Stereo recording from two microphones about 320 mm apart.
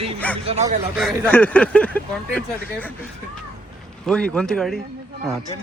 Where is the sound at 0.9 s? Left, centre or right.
Centre.